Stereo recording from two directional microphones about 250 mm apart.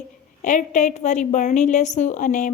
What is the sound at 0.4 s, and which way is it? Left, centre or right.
Speech, left.